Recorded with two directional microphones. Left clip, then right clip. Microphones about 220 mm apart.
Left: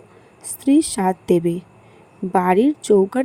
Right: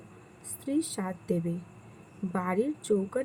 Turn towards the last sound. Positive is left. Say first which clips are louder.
# left 13 dB
turn(degrees=35)  # may be behind; listen again after turning